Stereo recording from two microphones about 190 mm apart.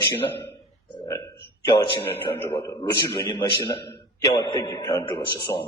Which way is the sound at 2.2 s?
20° left (ahead or behind).